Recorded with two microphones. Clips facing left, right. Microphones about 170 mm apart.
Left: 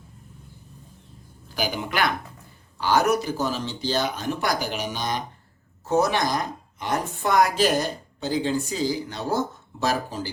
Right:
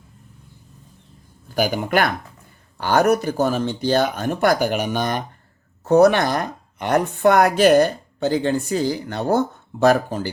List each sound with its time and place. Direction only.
1.5 s speech: 50° right (ahead or behind)